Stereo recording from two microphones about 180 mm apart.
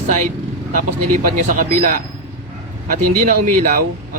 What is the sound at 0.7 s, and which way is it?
Speech, 45° right (ahead or behind).